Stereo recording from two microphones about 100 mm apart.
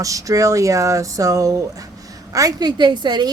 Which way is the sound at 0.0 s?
35° right (ahead or behind).